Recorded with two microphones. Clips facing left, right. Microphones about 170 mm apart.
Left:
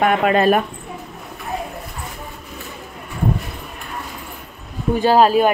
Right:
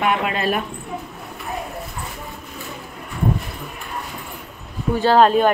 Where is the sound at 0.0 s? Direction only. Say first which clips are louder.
Left 6 dB; 50° left (ahead or behind).